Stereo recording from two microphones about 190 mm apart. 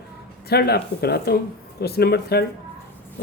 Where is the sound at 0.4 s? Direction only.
55° left (ahead or behind).